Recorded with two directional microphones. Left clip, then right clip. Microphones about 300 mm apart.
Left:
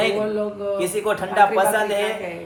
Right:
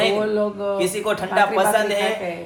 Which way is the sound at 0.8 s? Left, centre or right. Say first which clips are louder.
Left 1 dB; centre.